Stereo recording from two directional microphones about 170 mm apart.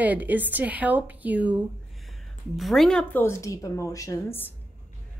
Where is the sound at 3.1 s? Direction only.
15° left (ahead or behind).